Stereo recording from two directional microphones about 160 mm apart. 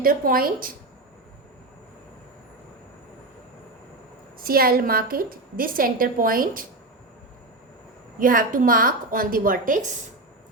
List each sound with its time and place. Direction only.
0.0 s a woman's voice: 65° right (ahead or behind)
4.4 s a woman's voice: 65° right (ahead or behind)
8.2 s a woman's voice: 60° right (ahead or behind)